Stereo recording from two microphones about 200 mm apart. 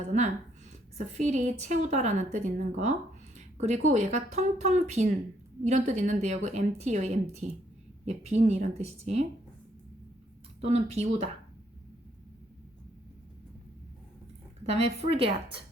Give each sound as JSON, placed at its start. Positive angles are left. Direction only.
{"t": 0.1, "sound": "a woman's voice", "side_deg": -40}
{"t": 10.6, "sound": "a woman's voice", "side_deg": -30}
{"t": 14.7, "sound": "a woman's voice", "side_deg": -30}